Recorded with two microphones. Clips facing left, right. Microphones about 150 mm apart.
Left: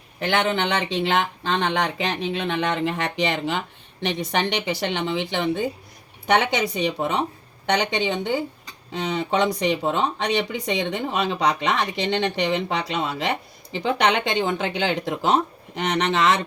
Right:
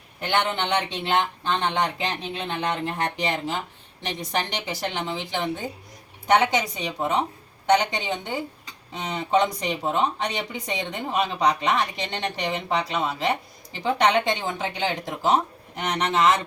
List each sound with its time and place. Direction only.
0.3 s speech: 90° left
10.7 s speech: 80° left
12.7 s speech: 75° left (ahead or behind)